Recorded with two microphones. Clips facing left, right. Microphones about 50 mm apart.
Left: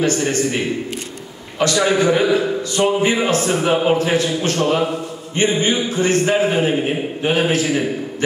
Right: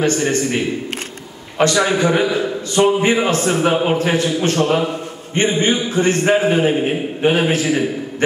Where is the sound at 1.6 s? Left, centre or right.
Right.